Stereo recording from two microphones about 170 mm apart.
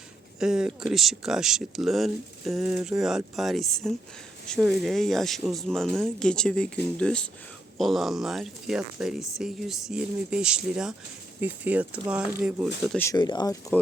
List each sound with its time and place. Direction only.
0.3 s speech: 5° right (ahead or behind)
13.0 s speech: 20° left (ahead or behind)